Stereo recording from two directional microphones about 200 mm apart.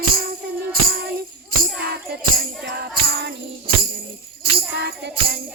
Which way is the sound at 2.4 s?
55° right (ahead or behind).